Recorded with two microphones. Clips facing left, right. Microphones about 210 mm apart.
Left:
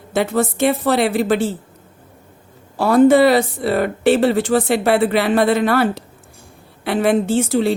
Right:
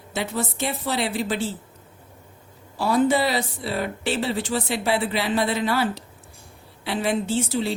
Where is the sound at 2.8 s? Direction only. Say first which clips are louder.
Left 9 dB; 60° left (ahead or behind).